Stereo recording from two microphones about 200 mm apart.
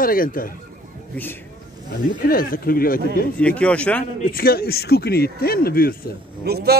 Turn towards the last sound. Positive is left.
turn(degrees=-50)  # may be behind; listen again after turning